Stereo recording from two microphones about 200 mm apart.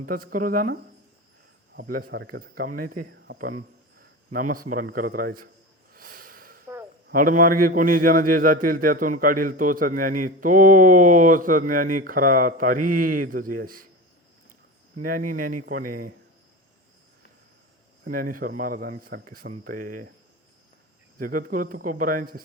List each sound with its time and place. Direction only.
0.0 s a man's voice: 45° right (ahead or behind)
5.9 s a sound: 45° right (ahead or behind)
7.1 s a man's voice: 45° right (ahead or behind)
14.9 s a man's voice: 45° right (ahead or behind)
18.0 s a man's voice: 45° right (ahead or behind)
21.2 s a man's voice: 45° right (ahead or behind)